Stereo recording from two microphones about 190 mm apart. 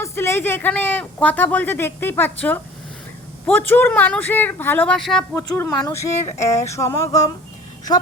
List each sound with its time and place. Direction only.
0.0 s speech: 15° left (ahead or behind)